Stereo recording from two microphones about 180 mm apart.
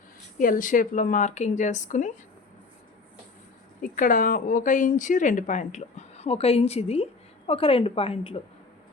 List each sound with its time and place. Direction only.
0.3 s speech: 50° left (ahead or behind)
3.8 s speech: 50° left (ahead or behind); by 8.4 s 30° left (ahead or behind)